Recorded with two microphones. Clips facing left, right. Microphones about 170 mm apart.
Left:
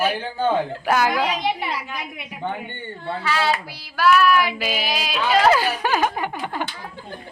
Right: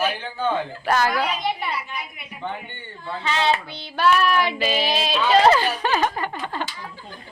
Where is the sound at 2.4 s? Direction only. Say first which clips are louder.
Left 3 dB; 50° left (ahead or behind).